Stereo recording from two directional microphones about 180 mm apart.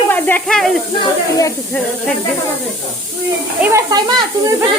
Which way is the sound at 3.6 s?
20° right (ahead or behind).